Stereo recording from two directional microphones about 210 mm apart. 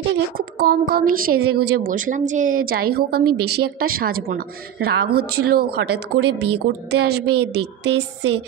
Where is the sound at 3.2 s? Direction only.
90° right.